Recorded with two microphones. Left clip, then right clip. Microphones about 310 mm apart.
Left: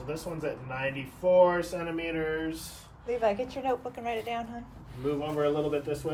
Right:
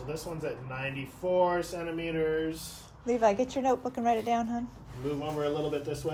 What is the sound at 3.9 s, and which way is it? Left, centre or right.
Speech, right.